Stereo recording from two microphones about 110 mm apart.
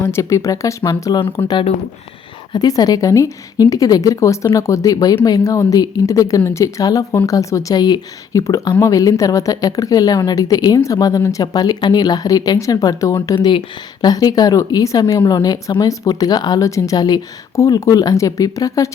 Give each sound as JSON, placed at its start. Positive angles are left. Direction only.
{"t": 0.1, "sound": "speech", "side_deg": 30}
{"t": 2.5, "sound": "speech", "side_deg": 35}